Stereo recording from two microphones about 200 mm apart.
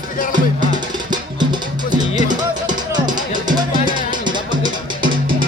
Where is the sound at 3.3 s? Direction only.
20° right (ahead or behind).